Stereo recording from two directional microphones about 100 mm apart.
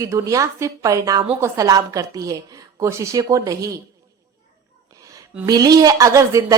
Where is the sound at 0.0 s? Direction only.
30° right (ahead or behind).